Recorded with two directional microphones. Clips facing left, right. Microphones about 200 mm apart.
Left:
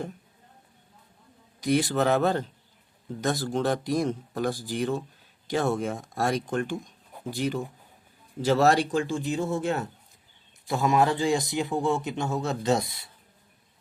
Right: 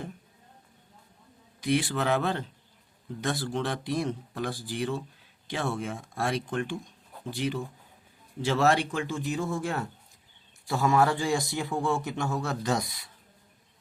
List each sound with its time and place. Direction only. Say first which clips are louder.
1.6 s a man's voice: left 3 dB; 40° left (ahead or behind); by 13.1 s 25° left (ahead or behind)